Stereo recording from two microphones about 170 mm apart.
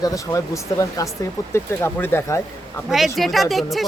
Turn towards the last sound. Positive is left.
turn(degrees=0)  # may be behind; listen again after turning